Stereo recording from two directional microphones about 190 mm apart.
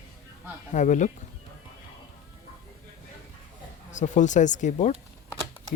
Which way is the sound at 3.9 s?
40° left (ahead or behind).